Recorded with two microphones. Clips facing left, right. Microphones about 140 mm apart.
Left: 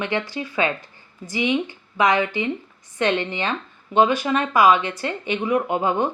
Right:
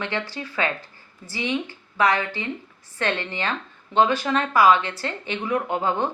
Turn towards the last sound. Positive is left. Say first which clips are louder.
# left 3 dB
turn(degrees=15)  # may be behind; listen again after turning